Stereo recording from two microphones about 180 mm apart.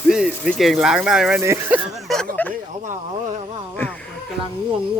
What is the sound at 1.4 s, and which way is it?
Speech, 15° right (ahead or behind).